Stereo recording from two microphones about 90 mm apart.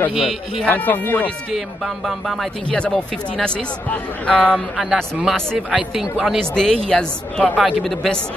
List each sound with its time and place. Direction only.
0.1 s speech: centre (ahead or behind)
0.7 s speech: 20° left (ahead or behind)
2.0 s speech: centre (ahead or behind)
4.7 s speech: 5° right (ahead or behind)
5.7 s speech: 10° right (ahead or behind)
6.5 s speech: 10° left (ahead or behind)